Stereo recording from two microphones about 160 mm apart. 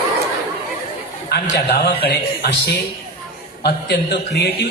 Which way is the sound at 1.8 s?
90° left.